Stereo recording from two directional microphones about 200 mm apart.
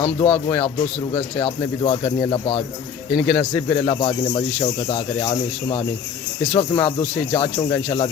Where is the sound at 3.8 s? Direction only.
25° left (ahead or behind).